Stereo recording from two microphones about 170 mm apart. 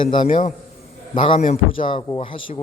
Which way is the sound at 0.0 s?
30° left (ahead or behind).